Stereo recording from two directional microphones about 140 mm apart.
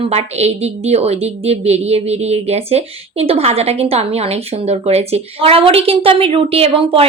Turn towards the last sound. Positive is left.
turn(degrees=-40)  # may be behind; listen again after turning